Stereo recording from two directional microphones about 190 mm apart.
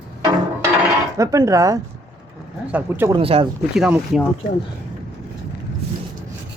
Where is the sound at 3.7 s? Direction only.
5° right (ahead or behind).